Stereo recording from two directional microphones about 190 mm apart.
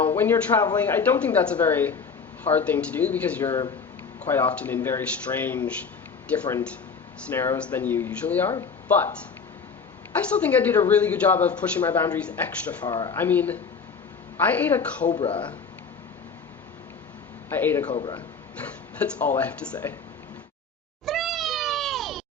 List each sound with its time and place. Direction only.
0.0 s speech: 10° left (ahead or behind)
10.3 s speech: 5° left (ahead or behind)
12.8 s speech: 20° left (ahead or behind)
13.1 s speech: 10° left (ahead or behind)
15.1 s speech: 25° left (ahead or behind)
17.5 s speech: 10° left (ahead or behind)
17.9 s speech: 25° left (ahead or behind)
18.9 s speech: 10° left (ahead or behind)
21.1 s cat: centre (ahead or behind)